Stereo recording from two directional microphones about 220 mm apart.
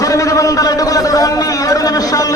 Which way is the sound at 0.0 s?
15° left (ahead or behind).